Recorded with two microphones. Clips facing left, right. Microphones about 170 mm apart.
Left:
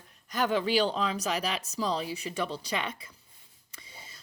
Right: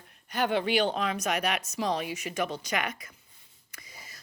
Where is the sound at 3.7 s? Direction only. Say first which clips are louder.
Even; 30° left (ahead or behind).